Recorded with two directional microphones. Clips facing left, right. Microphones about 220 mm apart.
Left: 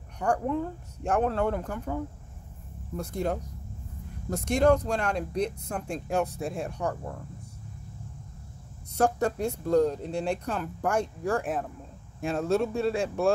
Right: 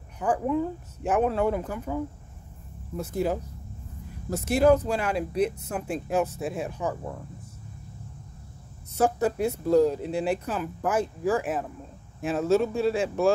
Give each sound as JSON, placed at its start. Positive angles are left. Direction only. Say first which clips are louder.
{"t": 0.2, "sound": "speech", "louder": "right 2 dB", "side_deg": -5}
{"t": 3.0, "sound": "speech", "louder": "right 3 dB", "side_deg": -5}
{"t": 8.9, "sound": "speech", "louder": "right 1 dB", "side_deg": -5}